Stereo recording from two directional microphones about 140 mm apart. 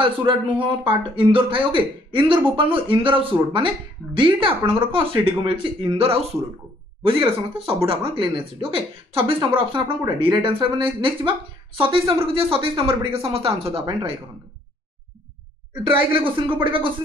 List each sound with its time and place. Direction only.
0.0 s speech: 35° right (ahead or behind)
15.9 s speech: 40° right (ahead or behind)